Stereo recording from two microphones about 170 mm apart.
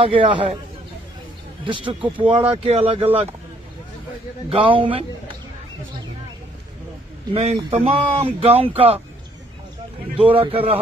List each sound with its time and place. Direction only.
0.0 s speech: 30° right (ahead or behind)
1.6 s speech: 30° right (ahead or behind)
4.5 s speech: 30° right (ahead or behind)
7.3 s speech: 35° right (ahead or behind)
10.1 s speech: 30° right (ahead or behind)